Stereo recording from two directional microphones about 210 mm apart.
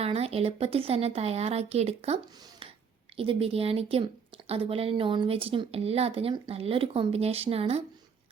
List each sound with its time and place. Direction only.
0.0 s speech: 30° right (ahead or behind)